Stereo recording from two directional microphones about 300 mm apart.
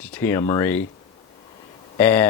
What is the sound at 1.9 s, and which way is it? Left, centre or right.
Speech, centre.